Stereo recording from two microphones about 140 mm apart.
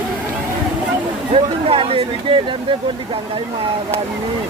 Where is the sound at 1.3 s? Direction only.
45° right (ahead or behind).